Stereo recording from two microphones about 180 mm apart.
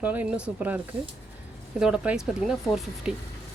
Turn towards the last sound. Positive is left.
turn(degrees=-5)  # may be behind; listen again after turning